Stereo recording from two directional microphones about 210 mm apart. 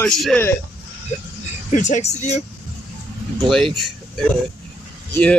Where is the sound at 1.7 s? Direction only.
35° left (ahead or behind).